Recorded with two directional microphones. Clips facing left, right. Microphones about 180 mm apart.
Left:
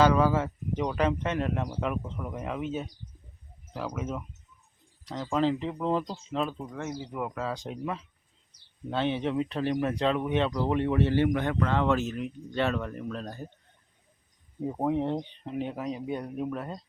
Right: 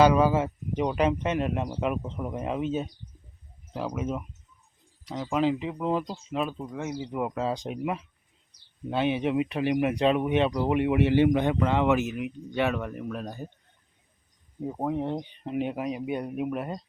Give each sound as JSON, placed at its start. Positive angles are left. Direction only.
{"t": 0.0, "sound": "speech", "side_deg": -15}
{"t": 14.6, "sound": "speech", "side_deg": 0}
{"t": 15.1, "sound": "speech", "side_deg": -10}